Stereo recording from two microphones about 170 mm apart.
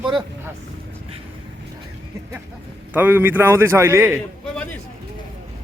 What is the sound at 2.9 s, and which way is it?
A man's voice, 10° right (ahead or behind).